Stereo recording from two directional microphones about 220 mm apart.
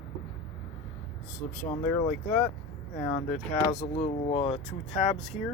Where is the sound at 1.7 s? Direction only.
10° left (ahead or behind).